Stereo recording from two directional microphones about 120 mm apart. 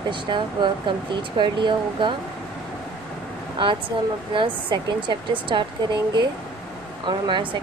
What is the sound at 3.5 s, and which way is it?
Speech, 45° right (ahead or behind).